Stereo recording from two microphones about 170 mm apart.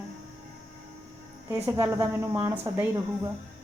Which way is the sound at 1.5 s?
10° right (ahead or behind).